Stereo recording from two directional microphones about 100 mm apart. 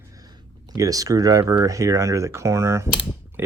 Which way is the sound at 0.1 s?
40° right (ahead or behind).